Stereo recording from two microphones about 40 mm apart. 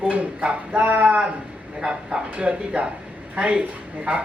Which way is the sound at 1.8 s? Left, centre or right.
Right.